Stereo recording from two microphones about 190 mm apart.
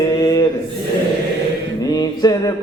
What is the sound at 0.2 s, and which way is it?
Mantra, 20° left (ahead or behind).